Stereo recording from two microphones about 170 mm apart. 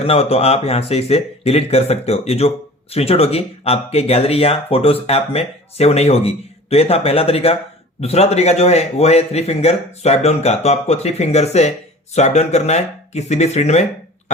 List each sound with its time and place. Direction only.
0.0 s speech: 35° left (ahead or behind)